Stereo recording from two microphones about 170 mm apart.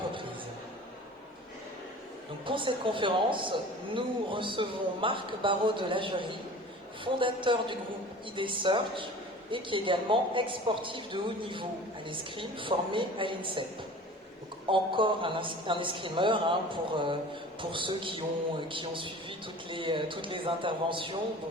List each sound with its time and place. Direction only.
2.5 s a woman's voice: 30° right (ahead or behind)
14.7 s a woman's voice: 30° right (ahead or behind)